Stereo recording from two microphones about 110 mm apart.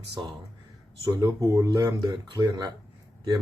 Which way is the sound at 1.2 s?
35° right (ahead or behind).